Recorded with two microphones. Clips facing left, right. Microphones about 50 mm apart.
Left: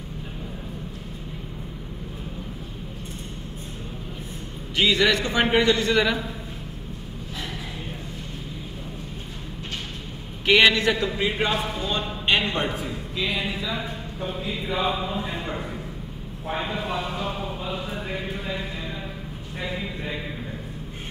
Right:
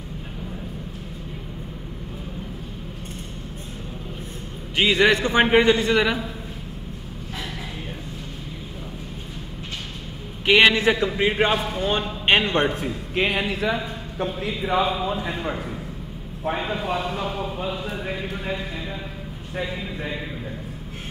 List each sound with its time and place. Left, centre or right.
4.7 s a man's voice: right
5.9 s a man's voice: centre
10.4 s a man's voice: centre
10.9 s a man's voice: right
14.8 s a man's voice: centre
16.8 s a man's voice: right